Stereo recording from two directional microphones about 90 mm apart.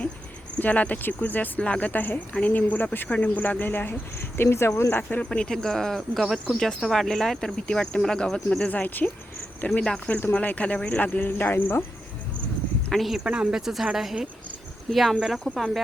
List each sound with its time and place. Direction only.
0.6 s speech: 15° left (ahead or behind)
9.8 s speech: 10° left (ahead or behind)
12.9 s speech: centre (ahead or behind)
13.2 s speech: 10° right (ahead or behind)